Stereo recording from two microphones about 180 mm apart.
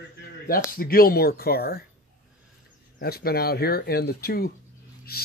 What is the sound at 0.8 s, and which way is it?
Speech, 55° left (ahead or behind).